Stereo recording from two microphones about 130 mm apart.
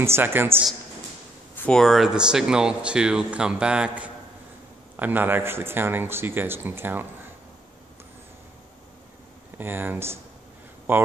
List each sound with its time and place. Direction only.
0.0 s speech: 20° right (ahead or behind)
1.6 s speech: 5° left (ahead or behind); by 7.1 s 15° right (ahead or behind)
9.6 s speech: 15° right (ahead or behind)